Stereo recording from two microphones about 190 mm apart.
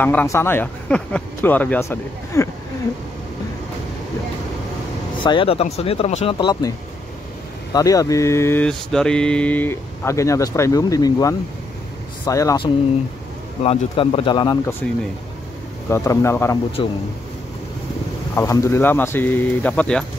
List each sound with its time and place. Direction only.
0.0 s mantra: 10° left (ahead or behind)
5.2 s speech: 25° left (ahead or behind)
6.3 s speech: 20° left (ahead or behind)
7.7 s mantra: 20° left (ahead or behind)
13.6 s speech: 30° left (ahead or behind)
14.8 s speech: 5° left (ahead or behind)
15.9 s mantra: 15° left (ahead or behind)
16.8 s speech: 25° left (ahead or behind)
18.3 s mantra: 15° left (ahead or behind)